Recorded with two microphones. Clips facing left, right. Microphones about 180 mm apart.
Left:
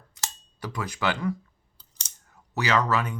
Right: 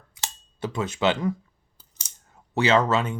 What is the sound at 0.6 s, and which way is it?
Speech, 25° right (ahead or behind).